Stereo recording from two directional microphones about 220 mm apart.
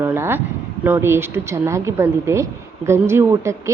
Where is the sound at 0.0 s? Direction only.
10° right (ahead or behind).